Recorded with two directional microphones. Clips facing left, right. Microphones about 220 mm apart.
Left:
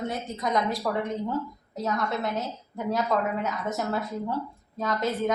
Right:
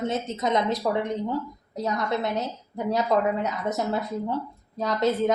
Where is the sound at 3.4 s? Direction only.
20° right (ahead or behind).